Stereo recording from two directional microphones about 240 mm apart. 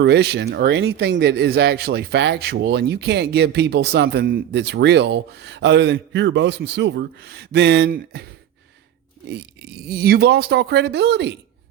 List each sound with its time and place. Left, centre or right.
0.0 s speech: right